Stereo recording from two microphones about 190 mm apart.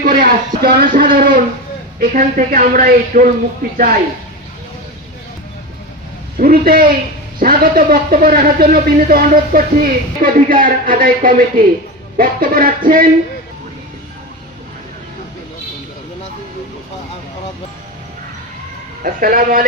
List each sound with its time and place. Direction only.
0.0 s speech: 50° right (ahead or behind)
6.3 s speech: 50° right (ahead or behind)
19.0 s speech: 45° right (ahead or behind)